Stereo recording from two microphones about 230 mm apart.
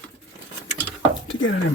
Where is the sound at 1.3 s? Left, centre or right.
Left.